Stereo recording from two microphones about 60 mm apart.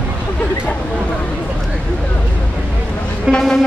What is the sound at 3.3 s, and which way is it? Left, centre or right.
Music, centre.